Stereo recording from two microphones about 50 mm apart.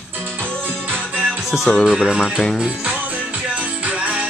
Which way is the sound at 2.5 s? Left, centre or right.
Right.